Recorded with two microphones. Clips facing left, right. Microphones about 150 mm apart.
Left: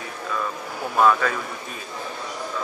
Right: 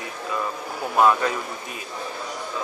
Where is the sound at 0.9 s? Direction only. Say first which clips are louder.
Even; 20° right (ahead or behind).